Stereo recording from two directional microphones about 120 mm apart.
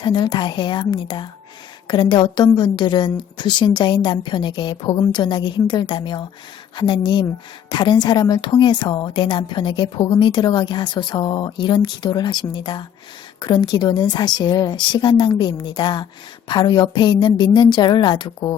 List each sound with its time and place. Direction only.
0.0 s a woman's voice: 40° left (ahead or behind)